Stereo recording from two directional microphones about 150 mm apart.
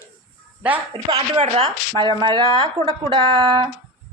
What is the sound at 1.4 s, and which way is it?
Chopping, 45° right (ahead or behind).